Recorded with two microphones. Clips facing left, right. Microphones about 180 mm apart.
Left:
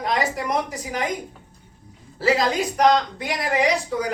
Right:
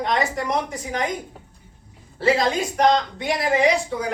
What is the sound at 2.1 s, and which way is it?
Speech, 30° right (ahead or behind).